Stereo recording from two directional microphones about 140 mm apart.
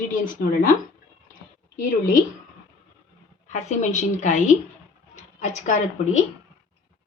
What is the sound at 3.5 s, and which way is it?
A woman's voice, 55° left (ahead or behind).